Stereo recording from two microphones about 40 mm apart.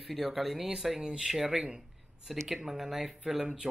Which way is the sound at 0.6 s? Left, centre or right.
Centre.